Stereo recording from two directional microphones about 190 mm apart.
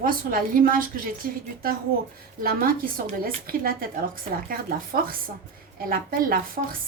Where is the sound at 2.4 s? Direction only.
50° right (ahead or behind).